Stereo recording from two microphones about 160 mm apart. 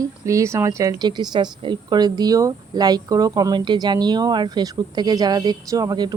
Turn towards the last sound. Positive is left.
turn(degrees=-25)  # may be behind; listen again after turning